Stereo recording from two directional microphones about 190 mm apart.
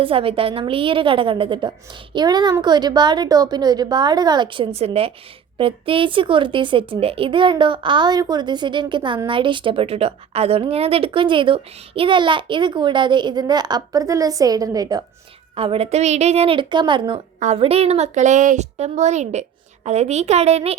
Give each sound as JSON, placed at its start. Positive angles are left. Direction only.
{"t": 0.0, "sound": "speech", "side_deg": -30}
{"t": 15.5, "sound": "a woman's voice", "side_deg": -30}